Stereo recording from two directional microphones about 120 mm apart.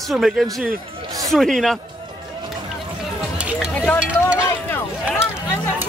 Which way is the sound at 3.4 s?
10° right (ahead or behind).